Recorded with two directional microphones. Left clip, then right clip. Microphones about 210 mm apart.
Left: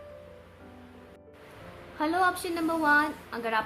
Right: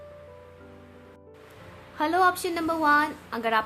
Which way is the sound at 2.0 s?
40° right (ahead or behind).